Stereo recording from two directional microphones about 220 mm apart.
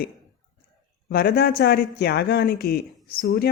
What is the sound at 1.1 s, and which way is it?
Speech, 45° left (ahead or behind).